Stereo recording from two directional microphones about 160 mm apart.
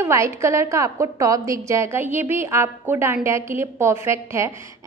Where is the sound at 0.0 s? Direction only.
20° right (ahead or behind).